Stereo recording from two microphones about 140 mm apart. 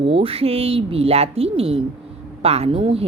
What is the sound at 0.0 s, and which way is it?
Speech, 45° right (ahead or behind).